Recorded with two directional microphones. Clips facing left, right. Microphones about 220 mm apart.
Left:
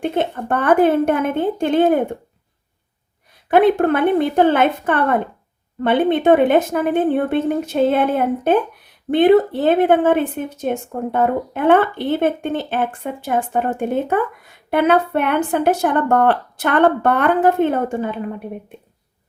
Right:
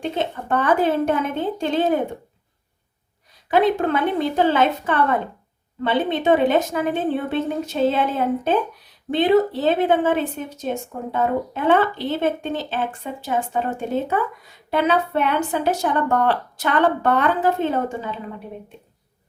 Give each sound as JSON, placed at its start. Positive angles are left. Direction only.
{"t": 0.0, "sound": "a woman's voice", "side_deg": 55}
{"t": 3.5, "sound": "a woman's voice", "side_deg": 55}